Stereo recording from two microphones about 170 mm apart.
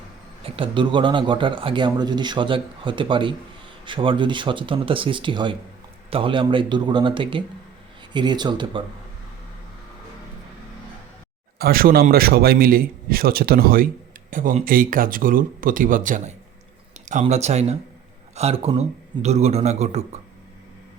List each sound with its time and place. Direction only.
0.4 s speech: 30° right (ahead or behind)
11.6 s a man's voice: 60° right (ahead or behind); by 20.0 s 40° right (ahead or behind)